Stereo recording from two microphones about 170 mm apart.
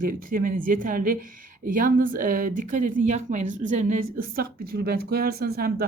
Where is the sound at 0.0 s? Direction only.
55° right (ahead or behind).